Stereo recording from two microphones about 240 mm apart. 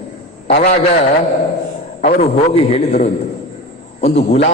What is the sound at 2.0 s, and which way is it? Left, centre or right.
A man's voice, left.